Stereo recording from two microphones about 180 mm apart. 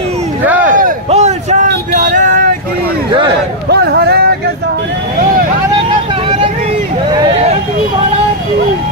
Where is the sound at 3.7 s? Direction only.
65° right (ahead or behind).